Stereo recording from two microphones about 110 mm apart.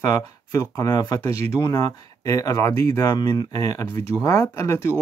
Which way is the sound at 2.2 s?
30° left (ahead or behind).